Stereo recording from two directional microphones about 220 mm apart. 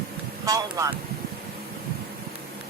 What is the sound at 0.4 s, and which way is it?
Vehicle, 15° right (ahead or behind).